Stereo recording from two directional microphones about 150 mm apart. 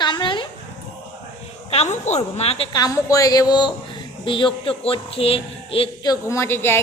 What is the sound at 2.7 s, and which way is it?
A woman's voice, 25° left (ahead or behind).